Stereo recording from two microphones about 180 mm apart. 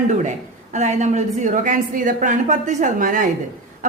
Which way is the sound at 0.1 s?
40° right (ahead or behind).